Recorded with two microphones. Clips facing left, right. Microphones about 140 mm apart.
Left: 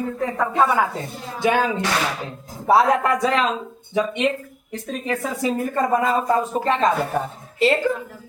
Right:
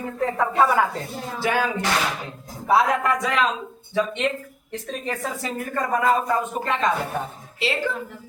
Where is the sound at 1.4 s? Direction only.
20° left (ahead or behind).